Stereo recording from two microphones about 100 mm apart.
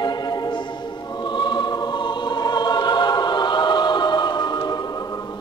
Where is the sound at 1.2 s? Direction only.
50° left (ahead or behind).